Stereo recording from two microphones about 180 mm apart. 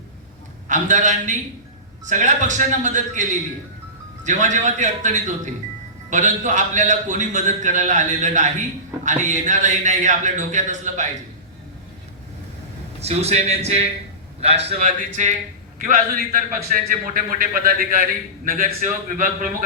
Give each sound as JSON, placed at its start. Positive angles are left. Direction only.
{"t": 0.7, "sound": "a man's voice", "side_deg": -45}
{"t": 13.0, "sound": "a man's voice", "side_deg": -35}
{"t": 15.8, "sound": "a man's voice", "side_deg": -55}